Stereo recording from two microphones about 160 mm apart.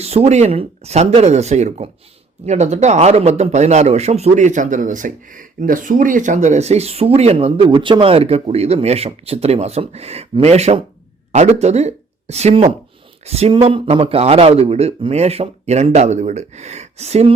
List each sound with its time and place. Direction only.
0.0 s a man's voice: 40° right (ahead or behind)